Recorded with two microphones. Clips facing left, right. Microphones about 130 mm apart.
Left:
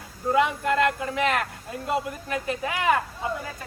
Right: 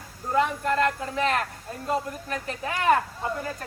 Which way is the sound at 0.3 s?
10° left (ahead or behind).